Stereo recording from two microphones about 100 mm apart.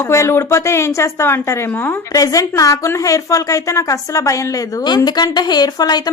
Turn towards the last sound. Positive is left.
turn(degrees=45)  # may be behind; listen again after turning